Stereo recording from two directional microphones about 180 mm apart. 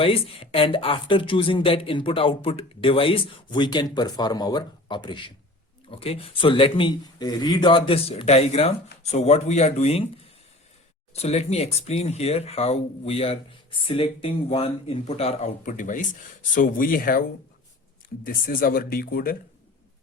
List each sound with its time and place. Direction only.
0.0 s speech: 30° left (ahead or behind)
11.1 s speech: 35° left (ahead or behind); by 19.4 s 55° left (ahead or behind)